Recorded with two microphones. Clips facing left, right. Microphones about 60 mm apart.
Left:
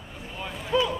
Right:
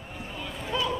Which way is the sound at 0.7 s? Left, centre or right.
Centre.